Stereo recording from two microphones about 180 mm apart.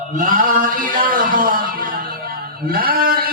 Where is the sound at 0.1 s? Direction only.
45° right (ahead or behind).